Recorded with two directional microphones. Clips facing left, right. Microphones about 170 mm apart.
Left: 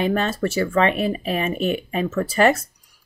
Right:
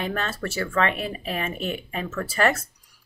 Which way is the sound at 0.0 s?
20° left (ahead or behind).